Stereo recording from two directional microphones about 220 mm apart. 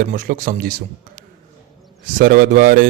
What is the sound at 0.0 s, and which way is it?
Speech, 40° right (ahead or behind).